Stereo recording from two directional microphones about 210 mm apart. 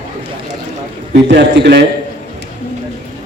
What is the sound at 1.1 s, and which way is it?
Speech, 55° right (ahead or behind).